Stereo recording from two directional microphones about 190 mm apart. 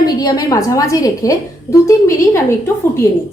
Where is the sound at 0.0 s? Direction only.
20° left (ahead or behind).